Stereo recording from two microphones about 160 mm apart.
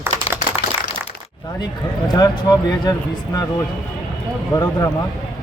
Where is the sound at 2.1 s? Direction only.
25° left (ahead or behind).